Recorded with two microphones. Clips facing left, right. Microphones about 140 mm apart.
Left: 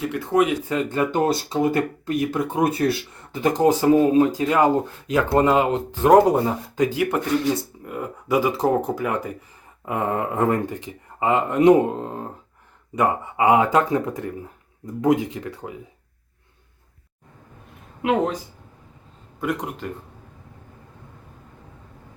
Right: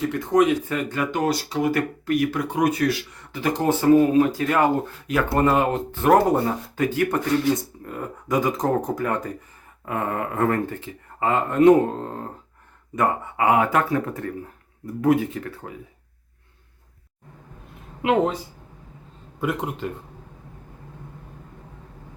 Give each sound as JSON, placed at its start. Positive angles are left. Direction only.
{"t": 0.1, "sound": "speech", "side_deg": 10}
{"t": 4.0, "sound": "speech", "side_deg": 25}
{"t": 9.8, "sound": "speech", "side_deg": 20}
{"t": 18.0, "sound": "speech", "side_deg": 0}
{"t": 19.4, "sound": "speech", "side_deg": -5}